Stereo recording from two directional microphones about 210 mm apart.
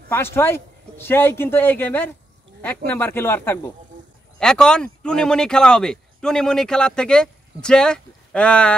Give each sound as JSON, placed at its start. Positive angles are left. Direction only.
{"t": 0.1, "sound": "a man's voice", "side_deg": 10}